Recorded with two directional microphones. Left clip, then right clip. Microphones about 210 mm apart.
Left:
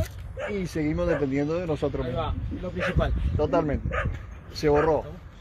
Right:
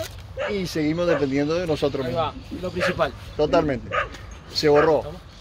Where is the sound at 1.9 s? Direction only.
15° right (ahead or behind).